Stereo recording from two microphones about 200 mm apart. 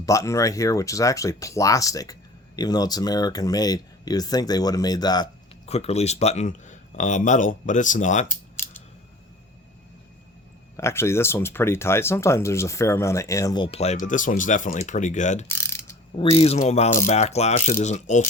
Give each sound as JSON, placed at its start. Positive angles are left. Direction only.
{"t": 0.0, "sound": "speech", "side_deg": 15}
{"t": 5.6, "sound": "speech", "side_deg": 30}
{"t": 10.8, "sound": "speech", "side_deg": 15}
{"t": 15.4, "sound": "mechanisms", "side_deg": 15}
{"t": 16.4, "sound": "speech", "side_deg": 35}